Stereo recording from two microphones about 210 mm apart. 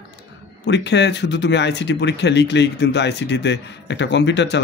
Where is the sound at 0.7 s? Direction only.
55° left (ahead or behind).